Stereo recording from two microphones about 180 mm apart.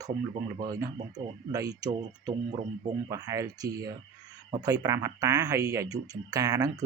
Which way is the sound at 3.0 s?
20° right (ahead or behind).